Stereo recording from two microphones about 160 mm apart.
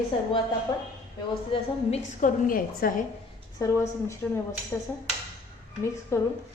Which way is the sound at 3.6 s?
15° left (ahead or behind).